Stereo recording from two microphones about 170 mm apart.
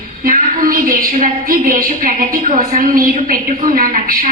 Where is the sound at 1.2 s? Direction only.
55° right (ahead or behind).